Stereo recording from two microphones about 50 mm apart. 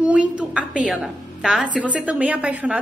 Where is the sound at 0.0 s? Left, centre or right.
Right.